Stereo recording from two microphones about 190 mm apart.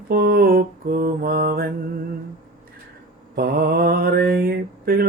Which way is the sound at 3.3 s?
55° right (ahead or behind).